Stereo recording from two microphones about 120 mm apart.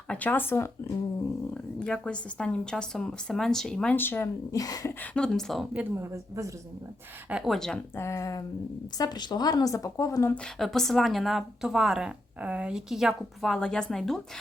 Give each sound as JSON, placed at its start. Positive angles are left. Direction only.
{"t": 0.1, "sound": "speech", "side_deg": 10}
{"t": 1.5, "sound": "speech", "side_deg": 10}
{"t": 3.9, "sound": "speech", "side_deg": 15}
{"t": 4.5, "sound": "speech", "side_deg": 30}
{"t": 4.9, "sound": "speech", "side_deg": 10}
{"t": 5.7, "sound": "speech", "side_deg": -15}
{"t": 7.3, "sound": "a woman's voice", "side_deg": -5}
{"t": 7.9, "sound": "speech", "side_deg": 25}
{"t": 9.0, "sound": "a woman's voice", "side_deg": 35}
{"t": 10.3, "sound": "a woman's voice", "side_deg": 5}